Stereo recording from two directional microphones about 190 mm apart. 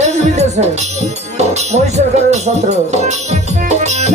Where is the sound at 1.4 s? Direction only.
35° right (ahead or behind).